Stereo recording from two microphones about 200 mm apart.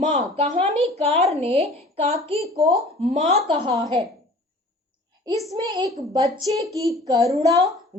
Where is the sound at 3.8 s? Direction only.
20° right (ahead or behind).